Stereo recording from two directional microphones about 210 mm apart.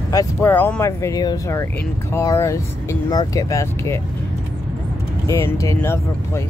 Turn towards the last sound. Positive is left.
turn(degrees=10)  # may be behind; listen again after turning